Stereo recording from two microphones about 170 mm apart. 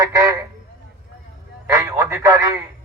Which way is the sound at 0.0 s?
20° right (ahead or behind).